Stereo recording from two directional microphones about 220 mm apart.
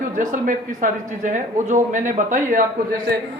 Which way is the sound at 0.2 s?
35° right (ahead or behind).